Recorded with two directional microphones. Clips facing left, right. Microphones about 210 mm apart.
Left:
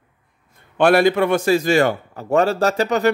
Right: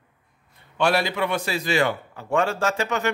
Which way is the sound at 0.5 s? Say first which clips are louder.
Left 7 dB; 55° left (ahead or behind).